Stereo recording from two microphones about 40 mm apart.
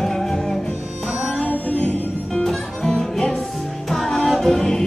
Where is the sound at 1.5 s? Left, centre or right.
Left.